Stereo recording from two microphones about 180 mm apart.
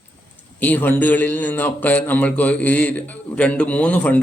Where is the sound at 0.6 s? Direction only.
10° left (ahead or behind).